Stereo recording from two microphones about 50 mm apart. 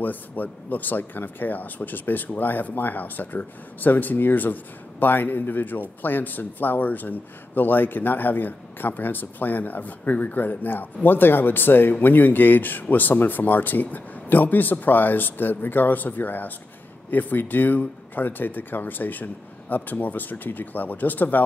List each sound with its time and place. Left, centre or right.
0.0 s a man's voice: left